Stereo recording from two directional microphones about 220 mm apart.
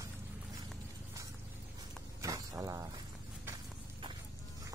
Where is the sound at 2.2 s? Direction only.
15° right (ahead or behind).